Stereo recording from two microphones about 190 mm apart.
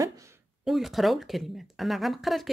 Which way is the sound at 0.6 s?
Centre (ahead or behind).